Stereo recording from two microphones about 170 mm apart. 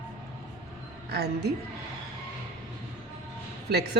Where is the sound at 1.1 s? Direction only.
75° right (ahead or behind).